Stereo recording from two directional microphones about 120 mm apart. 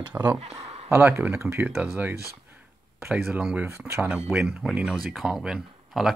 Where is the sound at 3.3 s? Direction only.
10° right (ahead or behind).